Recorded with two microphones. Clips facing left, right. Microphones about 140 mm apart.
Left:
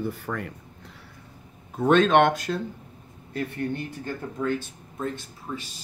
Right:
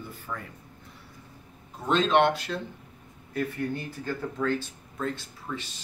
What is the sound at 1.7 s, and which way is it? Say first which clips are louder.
Speech: left 5 dB; 55° left (ahead or behind).